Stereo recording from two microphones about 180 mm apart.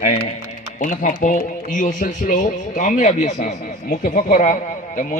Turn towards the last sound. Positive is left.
turn(degrees=45)  # may be behind; listen again after turning